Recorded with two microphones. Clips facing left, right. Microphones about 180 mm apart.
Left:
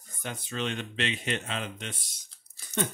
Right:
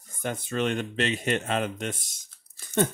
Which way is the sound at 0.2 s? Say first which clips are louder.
Right 6 dB; 50° right (ahead or behind).